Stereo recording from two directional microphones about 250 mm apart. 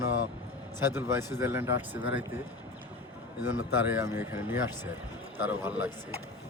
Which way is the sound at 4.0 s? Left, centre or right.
Centre.